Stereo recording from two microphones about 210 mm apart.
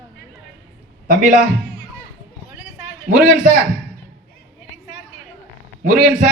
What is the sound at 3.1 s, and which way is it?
Speech, 40° right (ahead or behind).